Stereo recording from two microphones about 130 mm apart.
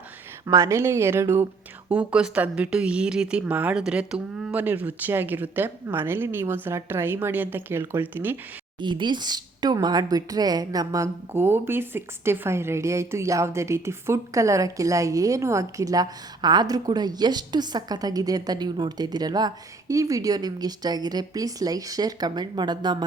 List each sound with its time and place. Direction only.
0.4 s a woman's voice: 25° right (ahead or behind)
8.8 s a woman's voice: 35° right (ahead or behind)